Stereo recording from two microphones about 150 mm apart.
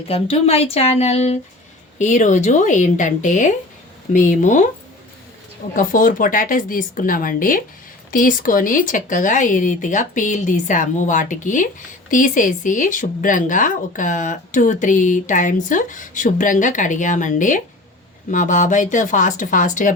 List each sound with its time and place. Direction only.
0.1 s speech: 40° left (ahead or behind)
5.7 s speech: 65° left (ahead or behind)